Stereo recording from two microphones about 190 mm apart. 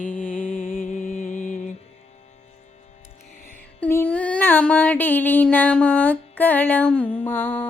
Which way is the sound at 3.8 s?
10° left (ahead or behind).